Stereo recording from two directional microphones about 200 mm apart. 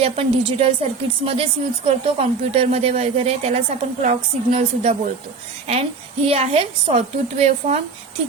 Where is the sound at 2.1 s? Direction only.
30° right (ahead or behind).